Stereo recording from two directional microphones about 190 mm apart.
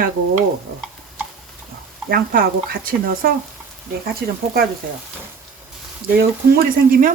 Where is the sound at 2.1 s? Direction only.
50° right (ahead or behind).